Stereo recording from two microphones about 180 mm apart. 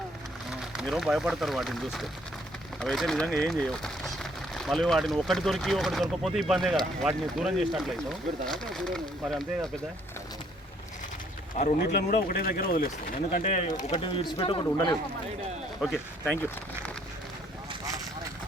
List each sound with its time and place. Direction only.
0.8 s speech: centre (ahead or behind)
11.9 s speech: 60° left (ahead or behind)
13.3 s speech: 45° left (ahead or behind)
14.0 s a man's voice: 30° left (ahead or behind)
15.8 s speech: centre (ahead or behind)